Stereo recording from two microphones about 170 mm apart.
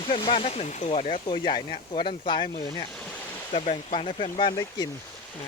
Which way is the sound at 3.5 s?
40° left (ahead or behind).